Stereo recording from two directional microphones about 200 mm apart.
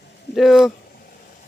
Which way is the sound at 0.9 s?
45° left (ahead or behind).